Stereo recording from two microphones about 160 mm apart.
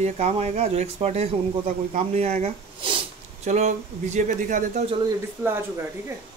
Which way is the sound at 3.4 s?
45° right (ahead or behind).